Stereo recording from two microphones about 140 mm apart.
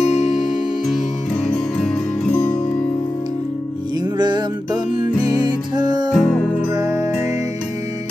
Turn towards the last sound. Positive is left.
turn(degrees=-25)  # may be behind; listen again after turning